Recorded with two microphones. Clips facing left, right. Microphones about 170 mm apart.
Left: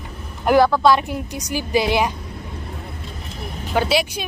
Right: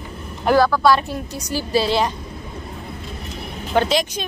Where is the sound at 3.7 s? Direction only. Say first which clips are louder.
Right 1 dB; 10° left (ahead or behind).